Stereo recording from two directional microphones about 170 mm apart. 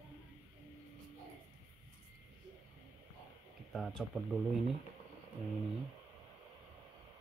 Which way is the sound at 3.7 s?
Centre (ahead or behind).